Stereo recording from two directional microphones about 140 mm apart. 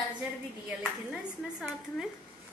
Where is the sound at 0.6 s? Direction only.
5° right (ahead or behind).